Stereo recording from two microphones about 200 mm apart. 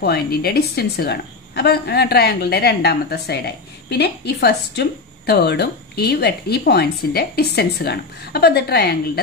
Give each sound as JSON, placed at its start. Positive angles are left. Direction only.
{"t": 0.0, "sound": "a woman's voice", "side_deg": 50}